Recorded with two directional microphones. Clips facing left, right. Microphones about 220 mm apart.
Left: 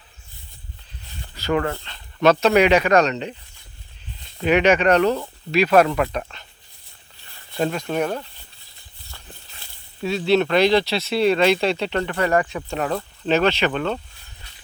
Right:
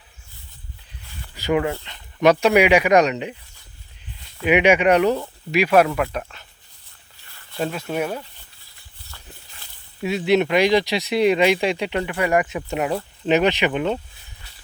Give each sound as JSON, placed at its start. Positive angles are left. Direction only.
{"t": 1.4, "sound": "speech", "side_deg": -15}
{"t": 4.4, "sound": "speech", "side_deg": -10}
{"t": 7.6, "sound": "speech", "side_deg": -5}
{"t": 10.0, "sound": "speech", "side_deg": -15}